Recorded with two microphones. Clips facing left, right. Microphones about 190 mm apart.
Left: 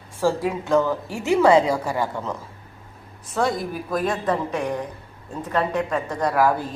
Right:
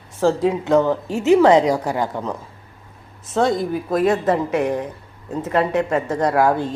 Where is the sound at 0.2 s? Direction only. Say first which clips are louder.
Right 4 dB; 20° right (ahead or behind).